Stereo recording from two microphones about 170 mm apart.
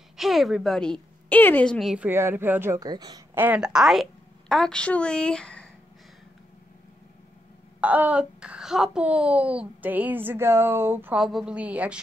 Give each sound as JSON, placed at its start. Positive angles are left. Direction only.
{"t": 0.2, "sound": "a woman's voice", "side_deg": 0}
{"t": 3.3, "sound": "a woman's voice", "side_deg": -10}
{"t": 7.8, "sound": "a child's voice", "side_deg": -10}